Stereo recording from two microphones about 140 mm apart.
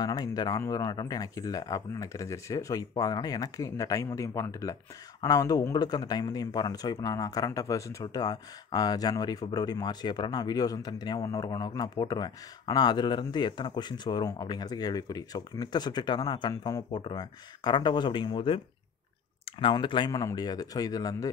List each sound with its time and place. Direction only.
0.0 s speech: 25° left (ahead or behind)
19.6 s speech: 35° left (ahead or behind)